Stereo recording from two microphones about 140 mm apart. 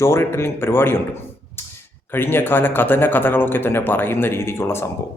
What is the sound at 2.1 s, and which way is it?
A man's voice, 15° left (ahead or behind).